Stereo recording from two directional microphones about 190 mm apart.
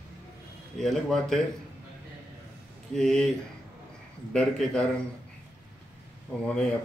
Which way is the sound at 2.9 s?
5° left (ahead or behind).